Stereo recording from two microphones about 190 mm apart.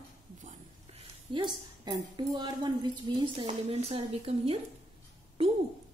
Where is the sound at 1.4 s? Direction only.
25° right (ahead or behind).